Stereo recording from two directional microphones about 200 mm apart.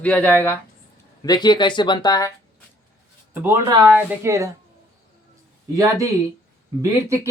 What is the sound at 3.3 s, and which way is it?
Speech, 10° right (ahead or behind).